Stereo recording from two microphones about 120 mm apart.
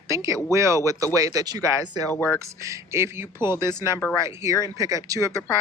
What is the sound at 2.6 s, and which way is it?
Speech, 25° right (ahead or behind).